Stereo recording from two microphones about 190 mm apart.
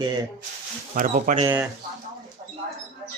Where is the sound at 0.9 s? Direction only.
45° right (ahead or behind).